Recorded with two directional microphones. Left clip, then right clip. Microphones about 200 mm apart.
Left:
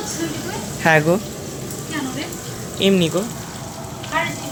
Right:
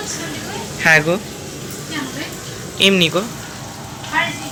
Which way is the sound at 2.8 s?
15° left (ahead or behind).